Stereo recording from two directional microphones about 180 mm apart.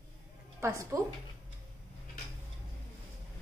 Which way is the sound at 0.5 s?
15° right (ahead or behind).